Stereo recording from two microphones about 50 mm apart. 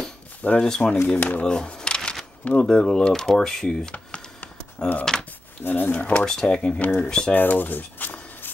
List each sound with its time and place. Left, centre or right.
0.6 s speech: centre
1.0 s speech: left; by 3.9 s centre
5.1 s speech: centre
5.6 s speech: left
6.2 s speech: centre
6.8 s speech: left
7.1 s speech: centre
7.3 s a sound: left